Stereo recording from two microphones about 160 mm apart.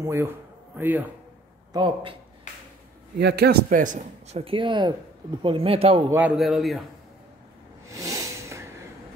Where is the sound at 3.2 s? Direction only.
90° right; by 4.4 s 55° right (ahead or behind).